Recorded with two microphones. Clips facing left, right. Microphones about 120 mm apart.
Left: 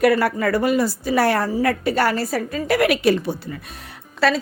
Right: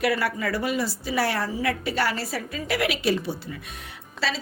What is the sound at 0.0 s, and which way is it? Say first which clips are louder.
A woman's voice: left 7 dB; 45° left (ahead or behind).